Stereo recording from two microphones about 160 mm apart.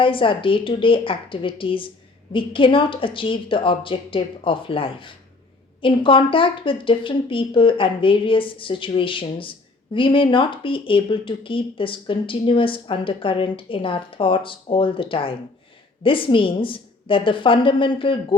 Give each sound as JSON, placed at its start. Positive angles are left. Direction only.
{"t": 0.0, "sound": "speech", "side_deg": 30}